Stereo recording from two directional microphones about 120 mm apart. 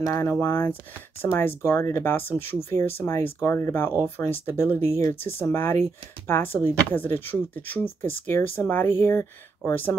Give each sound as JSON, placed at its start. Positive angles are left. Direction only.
{"t": 0.0, "sound": "speech", "side_deg": 25}